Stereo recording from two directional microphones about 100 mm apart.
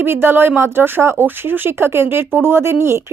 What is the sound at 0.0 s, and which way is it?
Speech, 25° right (ahead or behind).